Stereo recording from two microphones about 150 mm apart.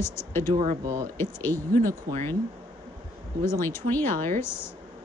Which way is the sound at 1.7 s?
65° right (ahead or behind).